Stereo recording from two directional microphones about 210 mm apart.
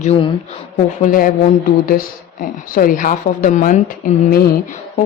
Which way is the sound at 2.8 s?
40° left (ahead or behind).